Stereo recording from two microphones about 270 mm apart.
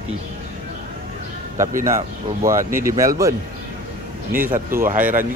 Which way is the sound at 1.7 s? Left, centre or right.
Right.